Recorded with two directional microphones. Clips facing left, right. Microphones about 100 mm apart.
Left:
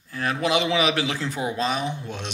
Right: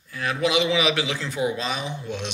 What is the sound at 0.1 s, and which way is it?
A man's voice, 40° left (ahead or behind).